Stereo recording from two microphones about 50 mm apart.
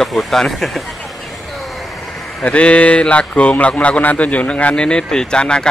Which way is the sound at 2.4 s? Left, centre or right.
Left.